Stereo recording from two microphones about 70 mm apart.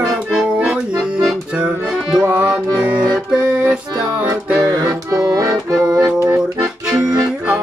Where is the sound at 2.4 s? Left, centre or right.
Centre.